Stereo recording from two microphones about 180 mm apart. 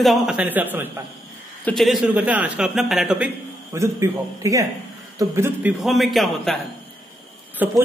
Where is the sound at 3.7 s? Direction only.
15° right (ahead or behind).